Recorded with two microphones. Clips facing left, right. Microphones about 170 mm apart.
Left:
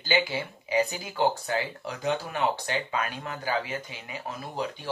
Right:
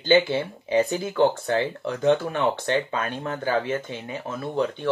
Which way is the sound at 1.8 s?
55° right (ahead or behind).